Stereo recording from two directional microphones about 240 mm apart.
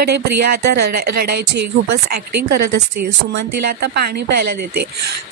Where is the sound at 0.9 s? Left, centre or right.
Right.